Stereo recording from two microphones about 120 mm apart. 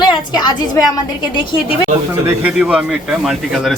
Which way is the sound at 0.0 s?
35° left (ahead or behind).